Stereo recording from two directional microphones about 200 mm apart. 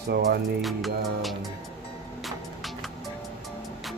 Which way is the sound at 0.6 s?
Centre (ahead or behind).